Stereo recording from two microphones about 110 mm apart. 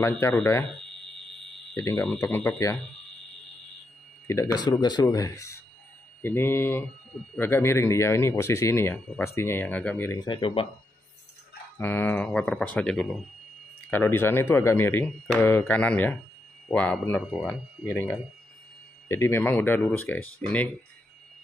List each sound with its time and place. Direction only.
0.3 s speech: 20° left (ahead or behind)
2.1 s speech: 20° left (ahead or behind)
4.3 s speech: 25° left (ahead or behind)
4.6 s speech: 40° left (ahead or behind); by 10.1 s 15° left (ahead or behind)
10.1 s speech: 45° left (ahead or behind)
11.8 s speech: 20° left (ahead or behind)
12.3 s speech: 10° left (ahead or behind)